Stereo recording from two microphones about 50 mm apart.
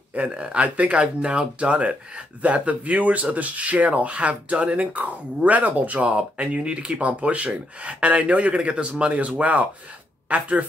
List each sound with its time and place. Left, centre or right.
0.1 s speech: right